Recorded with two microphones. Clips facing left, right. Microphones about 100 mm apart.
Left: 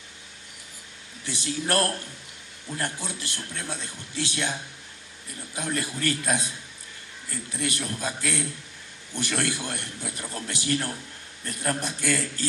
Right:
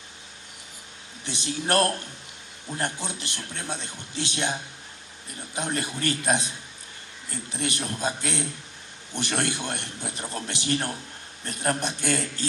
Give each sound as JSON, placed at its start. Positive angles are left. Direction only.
{"t": 1.2, "sound": "a man's voice", "side_deg": -20}